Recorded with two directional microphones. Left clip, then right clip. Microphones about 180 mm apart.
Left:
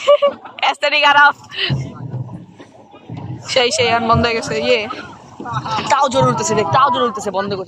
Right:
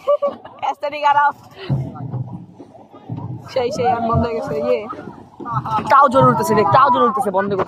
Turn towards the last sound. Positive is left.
turn(degrees=-55)  # may be behind; listen again after turning